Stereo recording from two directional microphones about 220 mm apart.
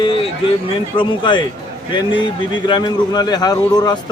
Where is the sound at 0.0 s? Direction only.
25° left (ahead or behind).